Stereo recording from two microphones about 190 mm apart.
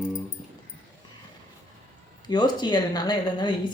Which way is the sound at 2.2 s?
25° left (ahead or behind).